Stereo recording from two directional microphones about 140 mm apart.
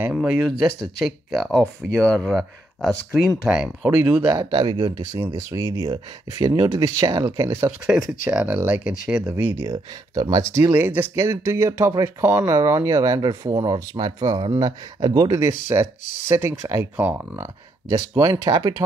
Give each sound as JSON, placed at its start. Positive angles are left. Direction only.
{"t": 0.1, "sound": "speech", "side_deg": 0}
{"t": 4.5, "sound": "speech", "side_deg": -35}
{"t": 7.8, "sound": "speech", "side_deg": -5}
{"t": 9.3, "sound": "speech", "side_deg": -15}
{"t": 17.8, "sound": "speech", "side_deg": -25}